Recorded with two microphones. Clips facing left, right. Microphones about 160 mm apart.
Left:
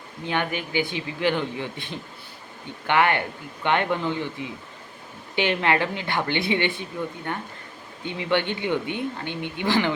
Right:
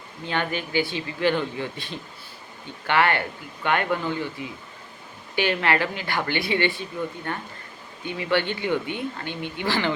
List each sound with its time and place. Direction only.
0.3 s speech: 15° left (ahead or behind)